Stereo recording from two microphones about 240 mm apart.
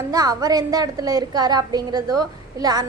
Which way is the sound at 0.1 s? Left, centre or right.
Centre.